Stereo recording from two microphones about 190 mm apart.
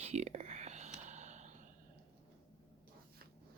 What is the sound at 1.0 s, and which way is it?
Gasp, 40° right (ahead or behind).